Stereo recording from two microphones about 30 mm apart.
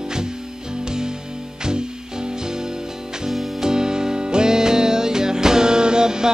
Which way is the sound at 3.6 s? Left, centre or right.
Right.